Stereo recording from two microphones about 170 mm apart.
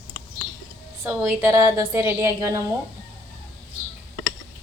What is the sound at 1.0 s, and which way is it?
A woman's voice, 15° right (ahead or behind).